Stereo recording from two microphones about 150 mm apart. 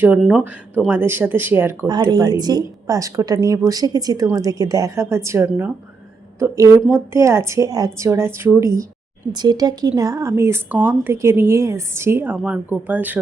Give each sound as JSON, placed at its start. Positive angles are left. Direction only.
{"t": 0.0, "sound": "speech", "side_deg": -10}
{"t": 1.9, "sound": "speech", "side_deg": -30}
{"t": 6.9, "sound": "speech", "side_deg": -20}